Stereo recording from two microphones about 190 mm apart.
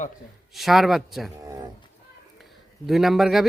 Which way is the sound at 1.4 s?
20° right (ahead or behind).